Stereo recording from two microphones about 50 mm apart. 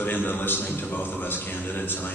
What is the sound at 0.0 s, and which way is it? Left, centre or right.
A man's voice, left.